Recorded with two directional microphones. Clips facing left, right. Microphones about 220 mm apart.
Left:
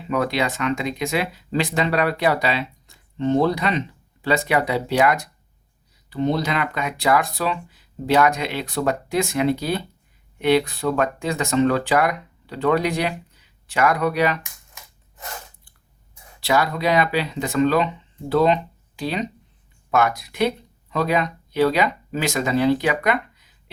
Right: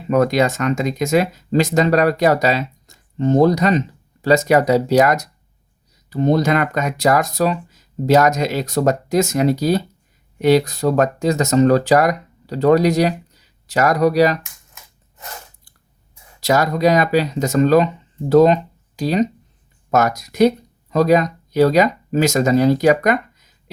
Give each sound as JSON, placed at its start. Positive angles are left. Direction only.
{"t": 0.1, "sound": "speech", "side_deg": -45}
{"t": 16.4, "sound": "speech", "side_deg": -40}